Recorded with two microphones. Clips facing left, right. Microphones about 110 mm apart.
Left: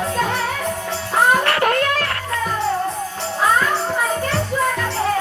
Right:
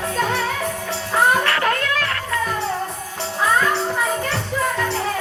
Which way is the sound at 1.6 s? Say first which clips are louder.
Left 3 dB; 40° left (ahead or behind).